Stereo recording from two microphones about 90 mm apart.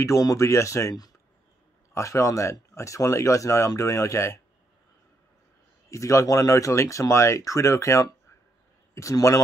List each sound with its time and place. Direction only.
0.0 s speech: 40° left (ahead or behind)
5.9 s speech: 35° left (ahead or behind)